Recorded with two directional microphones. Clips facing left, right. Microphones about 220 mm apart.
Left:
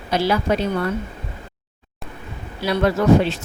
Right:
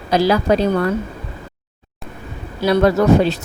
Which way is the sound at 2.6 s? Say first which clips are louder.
Right 5 dB; 40° right (ahead or behind).